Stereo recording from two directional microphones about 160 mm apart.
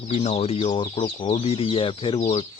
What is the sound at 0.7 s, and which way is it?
Speech, 30° left (ahead or behind).